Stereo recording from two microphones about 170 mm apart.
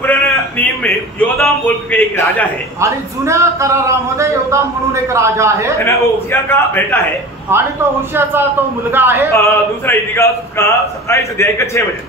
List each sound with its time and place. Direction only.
0.0 s a sound: 10° left (ahead or behind)
1.4 s speech: 10° left (ahead or behind)
2.8 s a man's voice: 15° right (ahead or behind)
5.8 s speech: 15° left (ahead or behind)
7.5 s a man's voice: 15° right (ahead or behind)
9.3 s speech: 15° left (ahead or behind)